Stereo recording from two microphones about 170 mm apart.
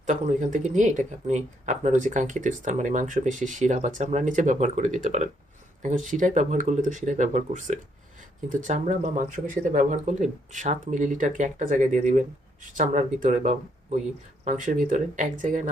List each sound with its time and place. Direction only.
0.0 s speech: 45° right (ahead or behind)